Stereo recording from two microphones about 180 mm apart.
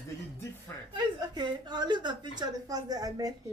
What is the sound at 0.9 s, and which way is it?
A woman's voice, 25° right (ahead or behind).